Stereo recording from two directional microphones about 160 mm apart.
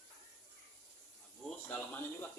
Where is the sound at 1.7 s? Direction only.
10° left (ahead or behind).